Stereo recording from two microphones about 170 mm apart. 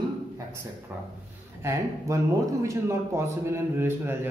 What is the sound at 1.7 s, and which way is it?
Speech, 15° right (ahead or behind).